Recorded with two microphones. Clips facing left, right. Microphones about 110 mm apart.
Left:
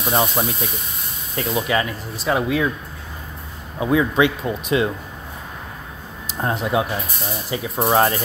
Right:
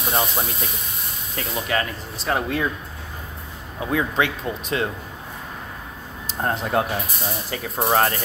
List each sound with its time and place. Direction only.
0.1 s speech: 25° left (ahead or behind)
3.8 s speech: 20° left (ahead or behind)
6.4 s speech: 15° left (ahead or behind)
7.9 s speech: 20° left (ahead or behind)